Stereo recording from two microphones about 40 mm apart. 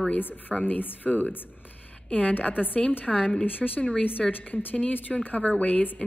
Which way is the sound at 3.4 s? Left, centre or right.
Left.